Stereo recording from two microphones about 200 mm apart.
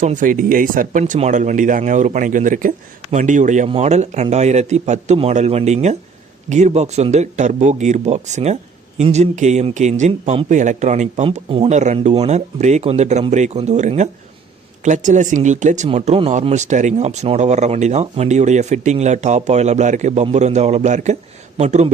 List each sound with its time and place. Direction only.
0.0 s speech: 40° right (ahead or behind)